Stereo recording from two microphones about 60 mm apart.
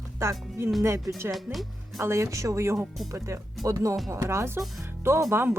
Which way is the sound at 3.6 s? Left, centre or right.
Right.